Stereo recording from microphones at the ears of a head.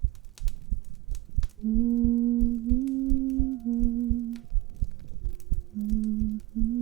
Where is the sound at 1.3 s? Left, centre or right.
Right.